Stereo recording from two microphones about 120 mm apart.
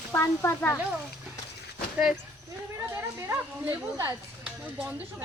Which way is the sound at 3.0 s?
25° right (ahead or behind).